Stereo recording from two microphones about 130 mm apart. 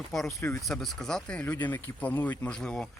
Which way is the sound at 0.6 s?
5° left (ahead or behind).